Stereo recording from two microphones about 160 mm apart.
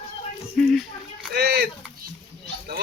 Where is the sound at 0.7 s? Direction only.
Centre (ahead or behind).